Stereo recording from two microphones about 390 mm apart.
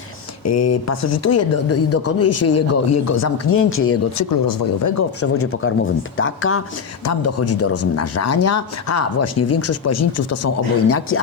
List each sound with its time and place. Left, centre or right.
0.4 s speech: left
4.2 s speech: left
5.2 s speech: left